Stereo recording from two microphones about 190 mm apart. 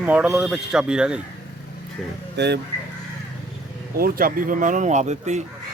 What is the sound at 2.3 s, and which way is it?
Speech, 65° right (ahead or behind).